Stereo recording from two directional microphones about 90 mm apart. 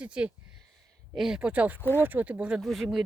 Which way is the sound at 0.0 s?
10° right (ahead or behind).